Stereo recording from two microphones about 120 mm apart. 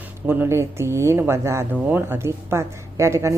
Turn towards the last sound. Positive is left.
turn(degrees=-25)  # may be behind; listen again after turning